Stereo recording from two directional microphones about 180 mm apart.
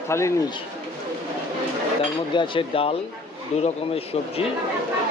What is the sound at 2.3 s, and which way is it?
Speech, 30° left (ahead or behind).